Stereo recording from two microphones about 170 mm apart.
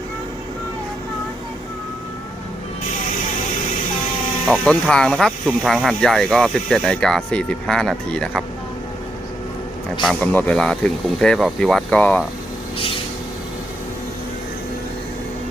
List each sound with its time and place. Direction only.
4.4 s speech: 5° left (ahead or behind)
10.0 s speech: 5° left (ahead or behind)